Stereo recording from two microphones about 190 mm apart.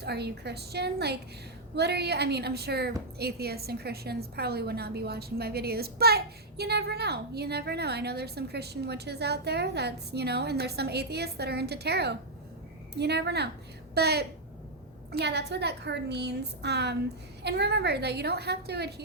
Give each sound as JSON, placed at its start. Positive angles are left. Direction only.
{"t": 0.0, "sound": "a woman's voice", "side_deg": -60}